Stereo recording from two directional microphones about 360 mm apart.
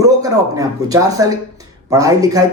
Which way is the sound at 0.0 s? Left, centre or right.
Centre.